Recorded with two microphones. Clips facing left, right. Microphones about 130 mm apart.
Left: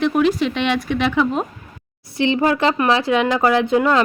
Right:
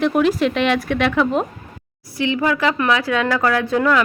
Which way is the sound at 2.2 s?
25° left (ahead or behind).